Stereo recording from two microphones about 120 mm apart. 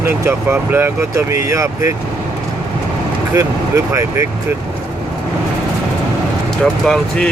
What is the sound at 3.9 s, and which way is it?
Speech, 25° right (ahead or behind).